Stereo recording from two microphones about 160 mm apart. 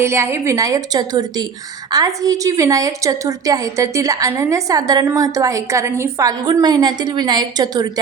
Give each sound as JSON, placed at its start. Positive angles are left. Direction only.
{"t": 0.0, "sound": "a woman's voice", "side_deg": -15}